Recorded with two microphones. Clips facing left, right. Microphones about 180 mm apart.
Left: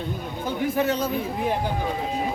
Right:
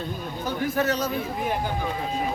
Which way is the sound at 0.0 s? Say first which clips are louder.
Left 1 dB; 20° left (ahead or behind).